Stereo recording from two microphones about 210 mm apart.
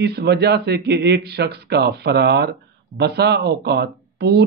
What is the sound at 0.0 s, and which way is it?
Speech, 50° right (ahead or behind).